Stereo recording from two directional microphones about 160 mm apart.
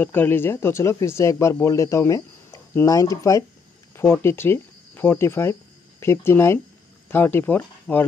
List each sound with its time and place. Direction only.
0.0 s speech: 10° left (ahead or behind)